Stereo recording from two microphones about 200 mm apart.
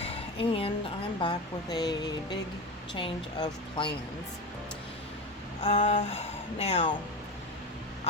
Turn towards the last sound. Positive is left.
turn(degrees=35)  # may be behind; listen again after turning